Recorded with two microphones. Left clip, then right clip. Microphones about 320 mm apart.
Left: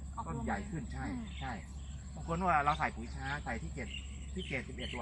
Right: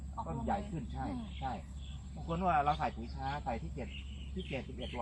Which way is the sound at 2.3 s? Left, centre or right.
Centre.